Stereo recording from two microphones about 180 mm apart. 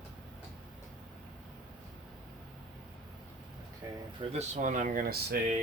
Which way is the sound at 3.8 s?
15° right (ahead or behind).